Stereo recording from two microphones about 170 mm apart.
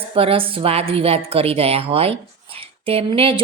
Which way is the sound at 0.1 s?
35° right (ahead or behind).